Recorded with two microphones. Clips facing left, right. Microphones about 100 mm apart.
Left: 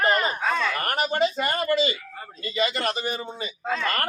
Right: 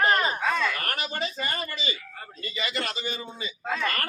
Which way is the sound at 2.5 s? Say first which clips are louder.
Left 7 dB; 55° left (ahead or behind).